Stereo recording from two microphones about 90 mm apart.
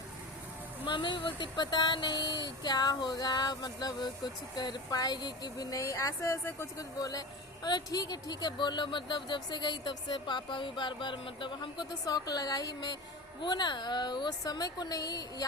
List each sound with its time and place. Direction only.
0.9 s a woman's voice: 65° left (ahead or behind); by 6.7 s 30° left (ahead or behind)
6.7 s a woman's voice: 45° left (ahead or behind)